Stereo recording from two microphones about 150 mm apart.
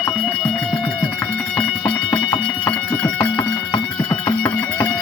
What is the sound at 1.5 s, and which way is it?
Music, 5° left (ahead or behind).